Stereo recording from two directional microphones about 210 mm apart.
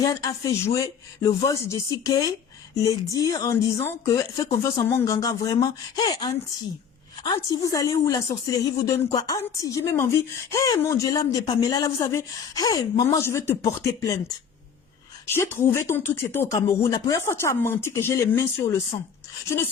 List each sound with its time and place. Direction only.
0.0 s speech: 15° left (ahead or behind)
15.3 s speech: 10° left (ahead or behind)